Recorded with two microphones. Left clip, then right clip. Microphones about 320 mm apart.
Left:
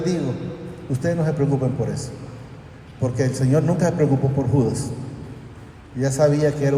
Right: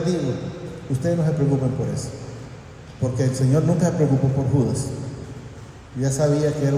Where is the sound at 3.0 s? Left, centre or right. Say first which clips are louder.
Left 1 dB; left.